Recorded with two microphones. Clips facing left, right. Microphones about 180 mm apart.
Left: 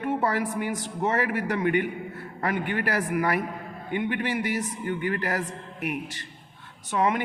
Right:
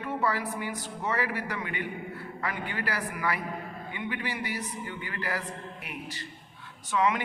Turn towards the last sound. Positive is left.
turn(degrees=50)  # may be behind; listen again after turning